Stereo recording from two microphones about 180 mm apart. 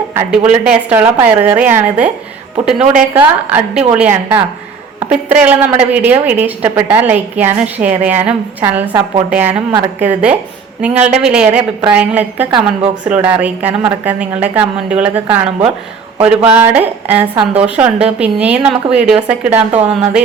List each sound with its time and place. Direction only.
0.1 s a woman's voice: 10° right (ahead or behind)
12.5 s a woman's voice: 30° right (ahead or behind)
13.1 s a woman's voice: 10° right (ahead or behind)